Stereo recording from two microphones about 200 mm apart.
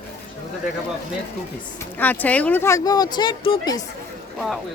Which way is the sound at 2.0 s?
10° left (ahead or behind).